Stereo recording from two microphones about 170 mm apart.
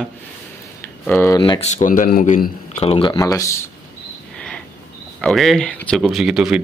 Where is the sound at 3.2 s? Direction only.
20° left (ahead or behind).